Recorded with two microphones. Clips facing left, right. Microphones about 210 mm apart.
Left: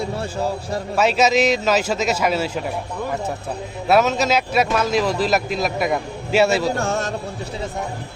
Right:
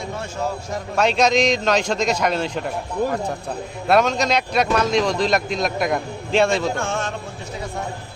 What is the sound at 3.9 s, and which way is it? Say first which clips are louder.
A man's voice: left 1 dB; 5° left (ahead or behind).